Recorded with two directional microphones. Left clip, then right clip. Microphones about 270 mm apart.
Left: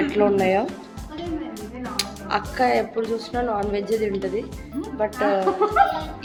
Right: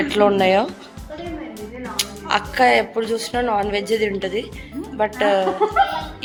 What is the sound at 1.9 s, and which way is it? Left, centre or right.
A woman's voice, centre.